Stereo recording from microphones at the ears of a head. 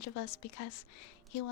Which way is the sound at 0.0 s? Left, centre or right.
Left.